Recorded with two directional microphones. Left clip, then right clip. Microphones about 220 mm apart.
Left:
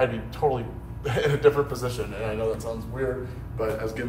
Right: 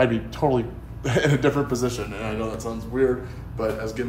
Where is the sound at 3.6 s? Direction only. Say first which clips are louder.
Right 2 dB; 10° right (ahead or behind).